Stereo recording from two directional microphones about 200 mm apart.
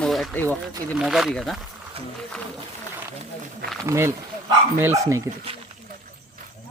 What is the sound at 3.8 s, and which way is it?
Speech, 15° right (ahead or behind).